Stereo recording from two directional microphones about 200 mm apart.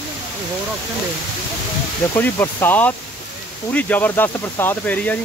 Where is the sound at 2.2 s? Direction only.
10° left (ahead or behind).